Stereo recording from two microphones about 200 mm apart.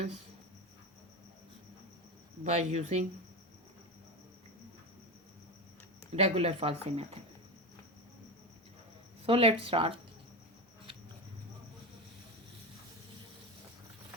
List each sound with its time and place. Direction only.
2.4 s speech: 35° right (ahead or behind)
6.1 s speech: 30° right (ahead or behind)
9.2 s speech: 30° right (ahead or behind)